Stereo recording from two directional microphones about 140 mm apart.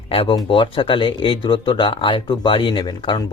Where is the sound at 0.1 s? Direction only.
40° left (ahead or behind).